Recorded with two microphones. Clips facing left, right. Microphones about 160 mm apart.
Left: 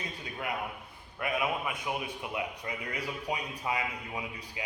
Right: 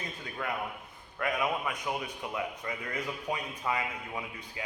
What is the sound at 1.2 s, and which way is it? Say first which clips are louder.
A man's voice: right 1 dB; 25° left (ahead or behind).